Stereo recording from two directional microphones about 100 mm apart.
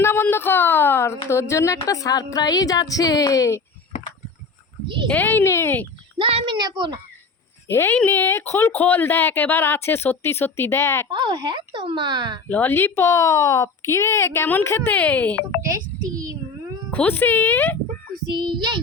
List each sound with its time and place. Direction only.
0.0 s speech: 25° left (ahead or behind)
5.0 s speech: 20° left (ahead or behind)
6.1 s speech: 65° right (ahead or behind)
6.5 s speech: 50° right (ahead or behind)
7.7 s speech: 20° left (ahead or behind)
11.1 s speech: 50° right (ahead or behind)
12.5 s speech: 20° left (ahead or behind)
15.6 s a child's voice: 35° right (ahead or behind)
16.9 s speech: 15° left (ahead or behind)
18.3 s speech: 50° right (ahead or behind)